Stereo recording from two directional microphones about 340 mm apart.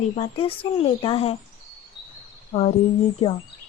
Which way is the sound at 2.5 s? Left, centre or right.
Centre.